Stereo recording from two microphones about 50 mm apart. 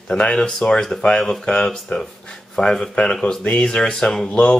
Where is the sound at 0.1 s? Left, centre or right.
Centre.